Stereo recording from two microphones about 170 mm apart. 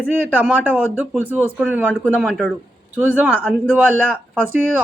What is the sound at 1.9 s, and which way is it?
Speech, 10° left (ahead or behind).